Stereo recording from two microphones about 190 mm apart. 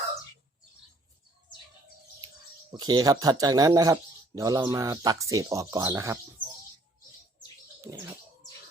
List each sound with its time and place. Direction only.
2.7 s speech: 20° right (ahead or behind)